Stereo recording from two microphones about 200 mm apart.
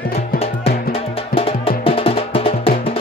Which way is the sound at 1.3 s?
30° left (ahead or behind).